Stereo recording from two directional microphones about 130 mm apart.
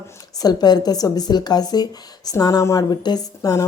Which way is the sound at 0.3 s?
30° left (ahead or behind).